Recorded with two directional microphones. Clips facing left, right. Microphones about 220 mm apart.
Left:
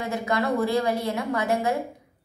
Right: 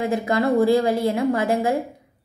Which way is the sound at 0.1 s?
30° right (ahead or behind).